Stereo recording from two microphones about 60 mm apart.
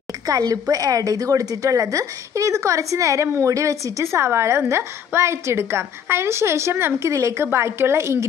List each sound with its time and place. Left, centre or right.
0.3 s a woman's voice: right
7.2 s a woman's voice: right